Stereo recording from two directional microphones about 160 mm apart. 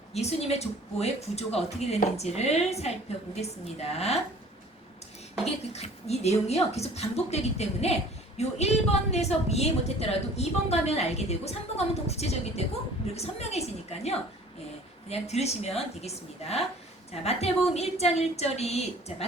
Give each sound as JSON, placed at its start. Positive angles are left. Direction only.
{"t": 0.1, "sound": "a woman's voice", "side_deg": 40}
{"t": 5.7, "sound": "a woman's voice", "side_deg": 40}